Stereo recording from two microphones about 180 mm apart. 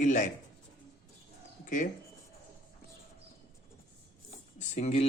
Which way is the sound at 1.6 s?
45° left (ahead or behind).